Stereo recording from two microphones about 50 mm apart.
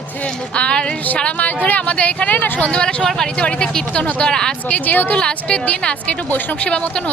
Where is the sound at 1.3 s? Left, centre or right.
Left.